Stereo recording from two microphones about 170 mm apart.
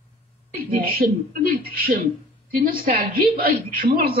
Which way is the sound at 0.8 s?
60° right (ahead or behind).